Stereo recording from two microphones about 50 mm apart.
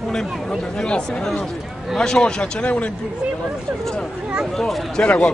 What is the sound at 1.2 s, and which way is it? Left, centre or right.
Speech, centre.